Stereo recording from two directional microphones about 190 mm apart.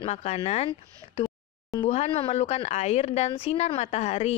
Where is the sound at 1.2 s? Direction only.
20° left (ahead or behind).